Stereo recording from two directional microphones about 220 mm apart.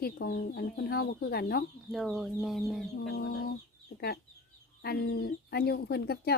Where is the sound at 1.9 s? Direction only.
Centre (ahead or behind).